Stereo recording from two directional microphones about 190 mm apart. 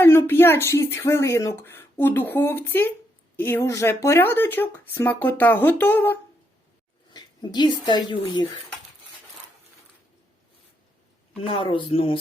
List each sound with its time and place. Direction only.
0.0 s speech: 10° left (ahead or behind)
7.1 s speech: 20° left (ahead or behind)
11.4 s speech: 30° left (ahead or behind)